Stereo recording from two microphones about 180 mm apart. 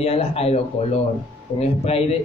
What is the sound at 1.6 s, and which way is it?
Speech, 35° left (ahead or behind).